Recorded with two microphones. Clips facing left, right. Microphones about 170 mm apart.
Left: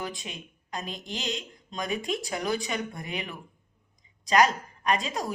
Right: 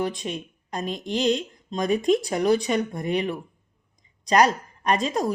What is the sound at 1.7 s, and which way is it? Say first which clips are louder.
A woman's voice: right 10 dB; 40° right (ahead or behind).